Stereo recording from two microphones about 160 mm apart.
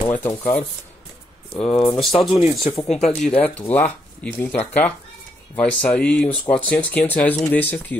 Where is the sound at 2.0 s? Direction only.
Centre (ahead or behind).